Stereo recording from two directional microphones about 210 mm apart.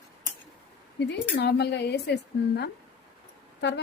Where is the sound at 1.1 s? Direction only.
50° left (ahead or behind).